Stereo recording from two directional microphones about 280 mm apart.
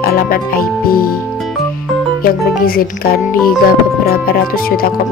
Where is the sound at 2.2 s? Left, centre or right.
Left.